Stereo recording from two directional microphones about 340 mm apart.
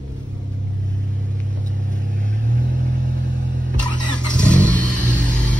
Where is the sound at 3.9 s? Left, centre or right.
Centre.